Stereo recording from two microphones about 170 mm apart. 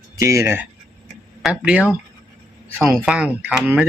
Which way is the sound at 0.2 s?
15° right (ahead or behind).